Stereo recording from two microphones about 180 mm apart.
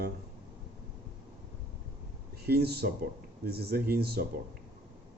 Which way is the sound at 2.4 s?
60° right (ahead or behind).